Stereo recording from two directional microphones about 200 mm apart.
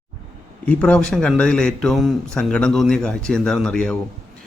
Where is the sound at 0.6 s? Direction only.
5° left (ahead or behind).